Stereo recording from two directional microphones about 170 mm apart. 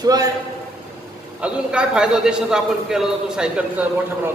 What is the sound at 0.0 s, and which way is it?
Speech, 20° right (ahead or behind).